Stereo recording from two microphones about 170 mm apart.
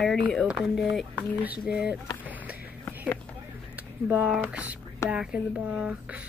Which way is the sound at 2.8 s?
10° left (ahead or behind).